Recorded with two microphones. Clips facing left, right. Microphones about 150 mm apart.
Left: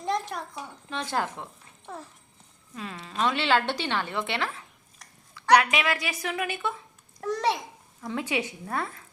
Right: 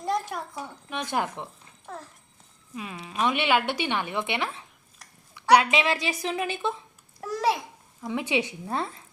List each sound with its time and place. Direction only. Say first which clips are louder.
0.0 s a sound: right 1 dB; 5° right (ahead or behind)
0.9 s a woman's voice: right 1 dB; 15° right (ahead or behind)
1.9 s a child's voice: even; centre (ahead or behind)
2.9 s a woman's voice: right 1 dB; 15° right (ahead or behind)
5.3 s a sound: right 1 dB; 20° right (ahead or behind)
5.7 s a woman's voice: right 3 dB; 25° right (ahead or behind)
7.2 s a child's voice: right 1 dB; 5° right (ahead or behind)
8.0 s a woman's voice: right 2 dB; 15° right (ahead or behind)